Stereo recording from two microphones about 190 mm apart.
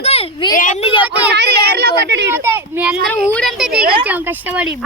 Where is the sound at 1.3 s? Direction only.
60° right (ahead or behind).